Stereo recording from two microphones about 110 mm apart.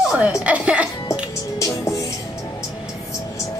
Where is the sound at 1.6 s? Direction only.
30° left (ahead or behind).